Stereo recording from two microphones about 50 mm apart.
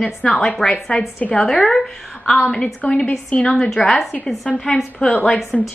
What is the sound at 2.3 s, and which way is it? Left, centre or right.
A woman's voice, centre.